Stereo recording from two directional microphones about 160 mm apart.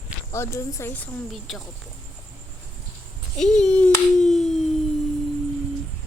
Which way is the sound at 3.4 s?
5° left (ahead or behind).